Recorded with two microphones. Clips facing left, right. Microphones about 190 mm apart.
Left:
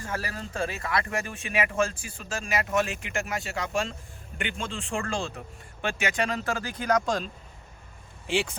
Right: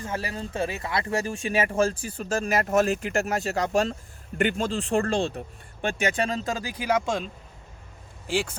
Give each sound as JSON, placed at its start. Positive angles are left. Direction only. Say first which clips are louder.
{"t": 0.0, "sound": "speech", "louder": "right 3 dB", "side_deg": -20}